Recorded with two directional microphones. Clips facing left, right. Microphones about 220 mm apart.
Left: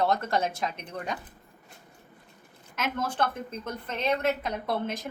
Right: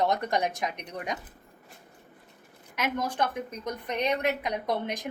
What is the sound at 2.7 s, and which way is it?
A woman's voice, 15° right (ahead or behind).